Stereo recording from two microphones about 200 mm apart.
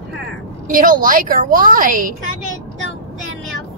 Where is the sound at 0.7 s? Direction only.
40° right (ahead or behind).